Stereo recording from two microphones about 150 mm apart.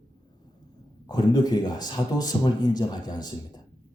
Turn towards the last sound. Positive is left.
turn(degrees=30)  # may be behind; listen again after turning